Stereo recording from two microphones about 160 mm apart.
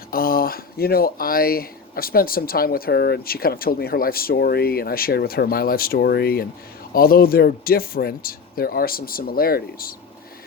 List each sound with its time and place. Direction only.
0.1 s speech: 65° left (ahead or behind)